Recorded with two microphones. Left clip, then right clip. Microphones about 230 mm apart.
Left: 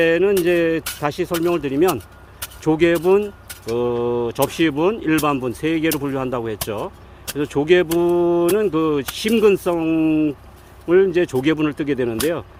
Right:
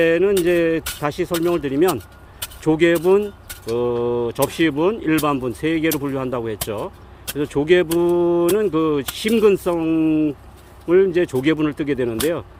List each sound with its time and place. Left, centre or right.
0.0 s speech: centre